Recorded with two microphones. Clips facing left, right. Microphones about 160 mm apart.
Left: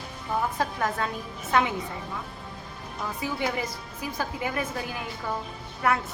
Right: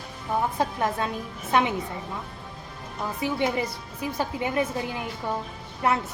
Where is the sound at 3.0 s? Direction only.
25° right (ahead or behind).